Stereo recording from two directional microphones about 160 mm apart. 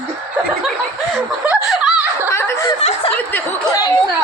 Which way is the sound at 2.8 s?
40° left (ahead or behind).